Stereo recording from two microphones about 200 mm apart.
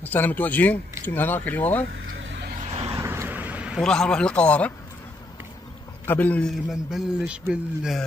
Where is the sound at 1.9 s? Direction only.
60° right (ahead or behind).